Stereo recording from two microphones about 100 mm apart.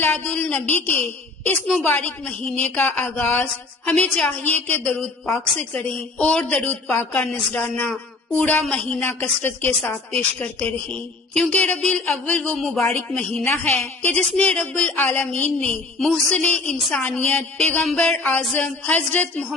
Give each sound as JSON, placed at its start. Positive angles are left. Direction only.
{"t": 0.0, "sound": "a woman's voice", "side_deg": 15}
{"t": 2.6, "sound": "a sound", "side_deg": 20}
{"t": 3.8, "sound": "a woman's voice", "side_deg": 10}
{"t": 9.0, "sound": "a woman's voice", "side_deg": 20}